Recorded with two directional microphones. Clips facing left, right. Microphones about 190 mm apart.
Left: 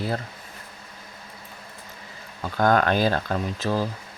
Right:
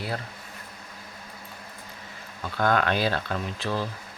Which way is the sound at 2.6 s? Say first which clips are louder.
Left 4 dB; 45° left (ahead or behind).